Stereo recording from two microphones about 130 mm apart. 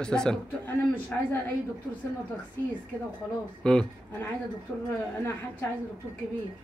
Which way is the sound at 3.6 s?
5° left (ahead or behind).